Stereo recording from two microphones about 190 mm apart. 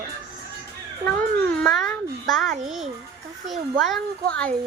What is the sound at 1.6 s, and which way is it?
A child's voice, centre (ahead or behind).